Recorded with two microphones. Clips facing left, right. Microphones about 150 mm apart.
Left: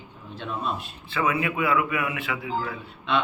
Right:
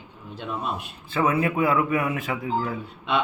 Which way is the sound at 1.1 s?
45° right (ahead or behind).